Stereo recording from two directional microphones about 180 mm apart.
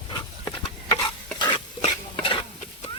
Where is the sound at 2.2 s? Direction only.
25° left (ahead or behind).